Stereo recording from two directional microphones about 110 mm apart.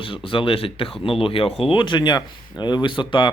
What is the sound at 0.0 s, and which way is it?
Speech, 50° left (ahead or behind).